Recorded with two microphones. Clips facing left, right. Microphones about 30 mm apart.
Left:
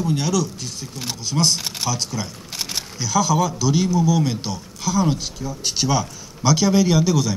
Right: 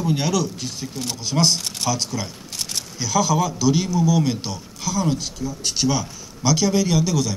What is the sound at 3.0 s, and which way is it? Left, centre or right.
Speech, centre.